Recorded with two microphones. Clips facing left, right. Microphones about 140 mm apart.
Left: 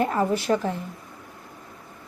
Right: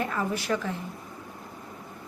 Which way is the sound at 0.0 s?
35° left (ahead or behind).